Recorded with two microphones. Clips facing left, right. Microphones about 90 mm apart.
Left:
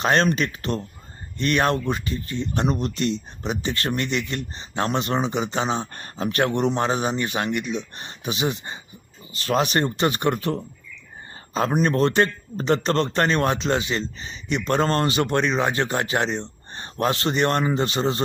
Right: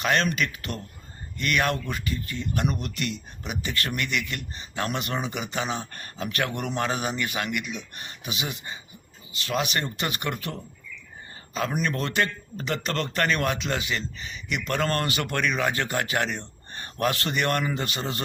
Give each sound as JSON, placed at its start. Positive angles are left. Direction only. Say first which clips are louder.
{"t": 0.0, "sound": "a man's voice", "louder": "left 4 dB", "side_deg": 35}